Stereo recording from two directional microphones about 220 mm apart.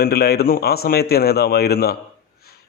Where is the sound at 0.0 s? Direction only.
45° left (ahead or behind).